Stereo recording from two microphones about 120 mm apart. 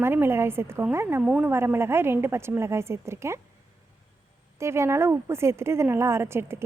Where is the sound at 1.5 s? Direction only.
20° right (ahead or behind).